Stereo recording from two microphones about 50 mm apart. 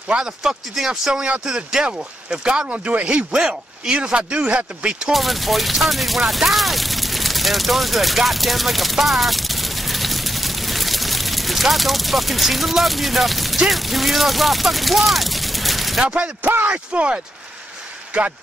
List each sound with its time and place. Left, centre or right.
0.1 s speech: centre
3.3 s speech: centre
5.1 s speech: centre
16.0 s speech: right
16.4 s speech: right